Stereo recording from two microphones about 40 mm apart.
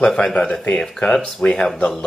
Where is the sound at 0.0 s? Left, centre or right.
Left.